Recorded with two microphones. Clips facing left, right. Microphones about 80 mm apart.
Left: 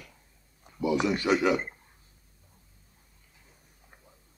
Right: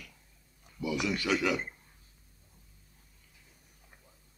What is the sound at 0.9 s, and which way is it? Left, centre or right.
Speech, left.